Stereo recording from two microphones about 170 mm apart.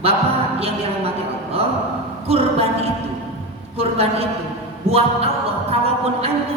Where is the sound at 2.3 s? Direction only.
35° right (ahead or behind).